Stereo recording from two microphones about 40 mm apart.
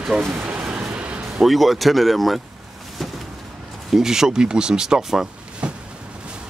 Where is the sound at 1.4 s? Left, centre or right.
Centre.